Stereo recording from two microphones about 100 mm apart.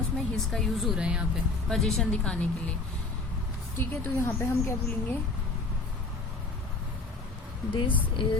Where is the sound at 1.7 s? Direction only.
5° left (ahead or behind).